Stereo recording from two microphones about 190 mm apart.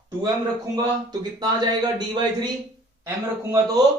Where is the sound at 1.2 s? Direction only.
20° right (ahead or behind).